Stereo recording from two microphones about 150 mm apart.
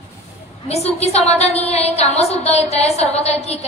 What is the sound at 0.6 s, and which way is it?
A woman's voice, 45° left (ahead or behind).